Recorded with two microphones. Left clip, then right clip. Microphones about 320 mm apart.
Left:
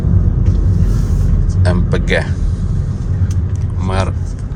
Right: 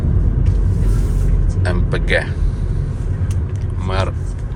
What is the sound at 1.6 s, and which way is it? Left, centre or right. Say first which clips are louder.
Speech: left 3 dB; centre.